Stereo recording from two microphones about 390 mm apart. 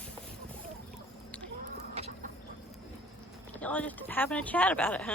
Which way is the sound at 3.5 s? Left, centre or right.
Centre.